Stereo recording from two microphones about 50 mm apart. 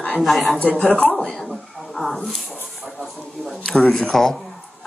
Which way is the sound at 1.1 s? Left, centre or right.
Centre.